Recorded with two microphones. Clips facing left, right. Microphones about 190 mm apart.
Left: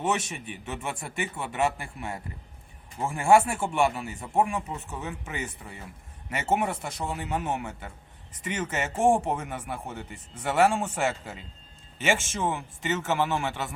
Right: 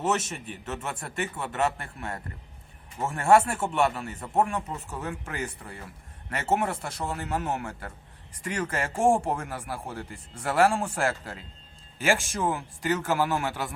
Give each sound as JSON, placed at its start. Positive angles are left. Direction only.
{"t": 0.3, "sound": "speech", "side_deg": 0}